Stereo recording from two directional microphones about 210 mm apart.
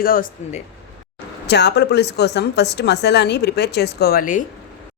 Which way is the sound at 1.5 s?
55° left (ahead or behind).